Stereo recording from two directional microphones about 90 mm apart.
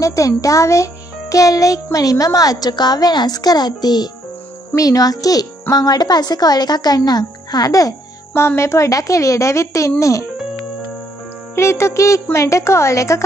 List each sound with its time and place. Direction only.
0.0 s a woman's voice: 40° left (ahead or behind)
4.7 s a child's voice: 40° left (ahead or behind)
8.4 s a woman's voice: 30° left (ahead or behind)
11.5 s a woman's voice: 30° left (ahead or behind)